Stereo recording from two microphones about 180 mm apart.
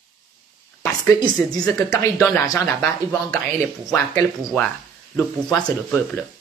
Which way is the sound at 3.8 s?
10° left (ahead or behind).